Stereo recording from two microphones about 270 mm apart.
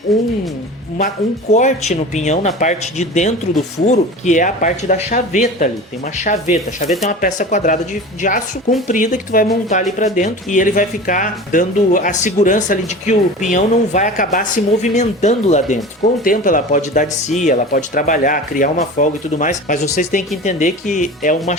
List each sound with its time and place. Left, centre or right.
0.1 s speech: centre
0.9 s speech: left
8.9 s speech: left